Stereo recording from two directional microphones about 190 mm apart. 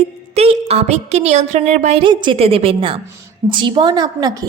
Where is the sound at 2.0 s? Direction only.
25° right (ahead or behind).